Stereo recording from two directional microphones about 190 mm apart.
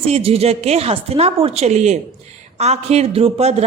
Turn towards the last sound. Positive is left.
turn(degrees=-35)  # may be behind; listen again after turning